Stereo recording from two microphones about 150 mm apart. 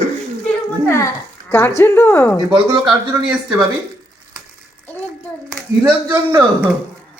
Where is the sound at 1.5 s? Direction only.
15° left (ahead or behind).